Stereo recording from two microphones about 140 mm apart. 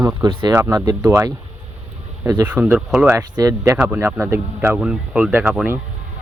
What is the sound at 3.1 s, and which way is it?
Speech, 25° right (ahead or behind).